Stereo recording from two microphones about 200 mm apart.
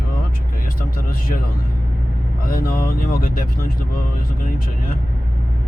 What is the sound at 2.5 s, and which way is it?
Speech, 50° left (ahead or behind).